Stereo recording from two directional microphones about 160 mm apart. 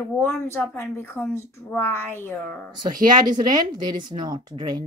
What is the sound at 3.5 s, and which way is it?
Speech, 25° right (ahead or behind).